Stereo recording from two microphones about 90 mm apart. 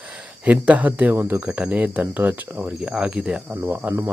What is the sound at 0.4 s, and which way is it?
Speech, 15° right (ahead or behind).